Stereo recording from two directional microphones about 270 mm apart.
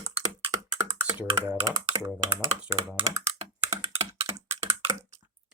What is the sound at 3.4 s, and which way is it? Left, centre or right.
Computer keyboard, centre.